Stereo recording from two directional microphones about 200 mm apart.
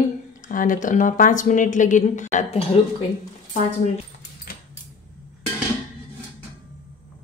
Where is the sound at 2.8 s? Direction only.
30° left (ahead or behind).